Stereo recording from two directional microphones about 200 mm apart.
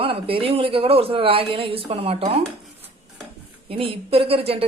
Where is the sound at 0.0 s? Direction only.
25° right (ahead or behind).